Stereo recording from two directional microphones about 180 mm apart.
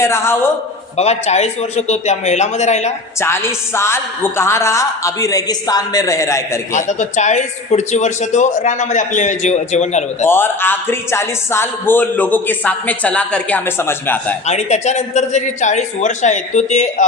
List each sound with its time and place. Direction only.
0.0 s a man's voice: 15° left (ahead or behind)
0.9 s a man's voice: 35° left (ahead or behind)
3.2 s a man's voice: 15° left (ahead or behind)
6.7 s a man's voice: 40° left (ahead or behind)
10.2 s a man's voice: 10° left (ahead or behind)
14.4 s a man's voice: 40° left (ahead or behind)